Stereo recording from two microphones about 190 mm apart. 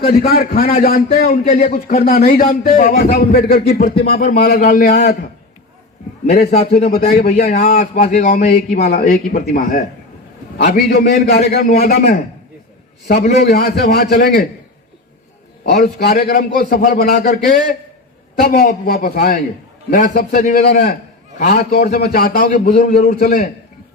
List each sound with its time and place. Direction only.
0.3 s a man's voice: 55° left (ahead or behind); by 2.0 s 35° left (ahead or behind)
2.2 s a man's voice: 50° left (ahead or behind)
6.2 s a man's voice: 55° left (ahead or behind)
6.5 s a man's voice: 35° left (ahead or behind)
6.8 s a man's voice: 55° left (ahead or behind); by 9.6 s 35° left (ahead or behind)
10.6 s a man's voice: 45° left (ahead or behind)
13.2 s a man's voice: 50° left (ahead or behind)
15.7 s a man's voice: 55° left (ahead or behind)
18.4 s a man's voice: 50° left (ahead or behind)